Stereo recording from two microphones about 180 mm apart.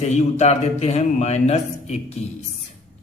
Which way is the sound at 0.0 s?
40° left (ahead or behind).